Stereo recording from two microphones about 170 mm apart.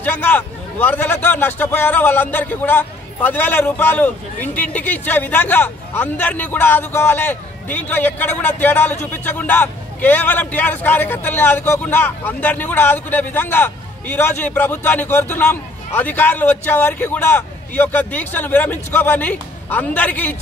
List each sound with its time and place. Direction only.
0.0 s a man's voice: 10° left (ahead or behind)